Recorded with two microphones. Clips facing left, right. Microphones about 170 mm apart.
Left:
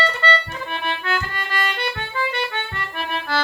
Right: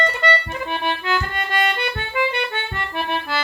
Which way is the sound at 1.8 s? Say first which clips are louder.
Right 3 dB; 15° right (ahead or behind).